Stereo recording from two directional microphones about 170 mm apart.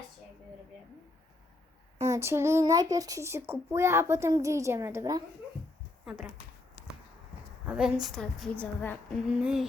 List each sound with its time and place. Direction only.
2.0 s a child's voice: 15° right (ahead or behind)
6.1 s a woman's voice: 5° right (ahead or behind)
7.7 s a woman's voice: 5° right (ahead or behind)
9.4 s a woman's voice: 5° right (ahead or behind)